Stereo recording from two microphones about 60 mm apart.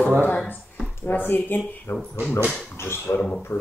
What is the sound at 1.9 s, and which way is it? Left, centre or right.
Speech, left.